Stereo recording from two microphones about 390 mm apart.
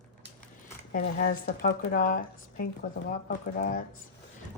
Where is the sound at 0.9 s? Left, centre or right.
Left.